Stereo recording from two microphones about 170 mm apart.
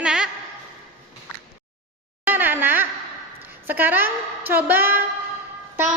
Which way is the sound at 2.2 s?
10° right (ahead or behind).